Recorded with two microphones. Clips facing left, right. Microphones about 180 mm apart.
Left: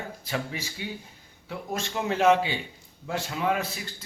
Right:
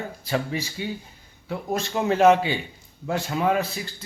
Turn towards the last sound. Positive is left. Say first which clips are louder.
# right 4 dB
turn(degrees=-35)  # may be behind; listen again after turning